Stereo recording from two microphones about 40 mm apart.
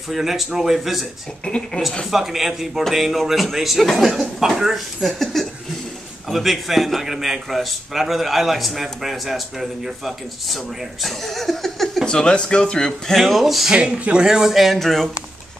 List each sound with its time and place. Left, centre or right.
0.2 s speech: centre
1.4 s speech: left
2.0 s a man's voice: centre
5.0 s a man's voice: centre
12.1 s speech: left
13.1 s a man's voice: centre
13.7 s speech: right
14.2 s speech: centre
14.6 s a man's voice: centre